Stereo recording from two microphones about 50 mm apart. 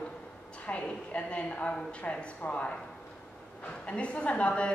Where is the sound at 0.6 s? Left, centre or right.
Left.